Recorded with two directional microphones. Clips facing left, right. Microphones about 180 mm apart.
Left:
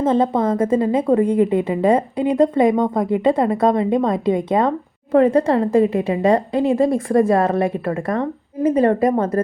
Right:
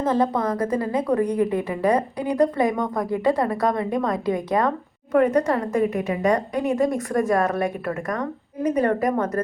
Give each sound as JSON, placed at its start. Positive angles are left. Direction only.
{"t": 0.0, "sound": "a woman's voice", "side_deg": 25}